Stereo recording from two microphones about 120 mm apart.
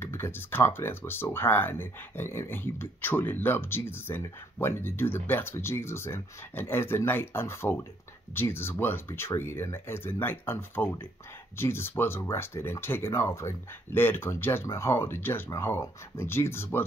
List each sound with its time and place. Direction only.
0.0 s speech: 20° left (ahead or behind)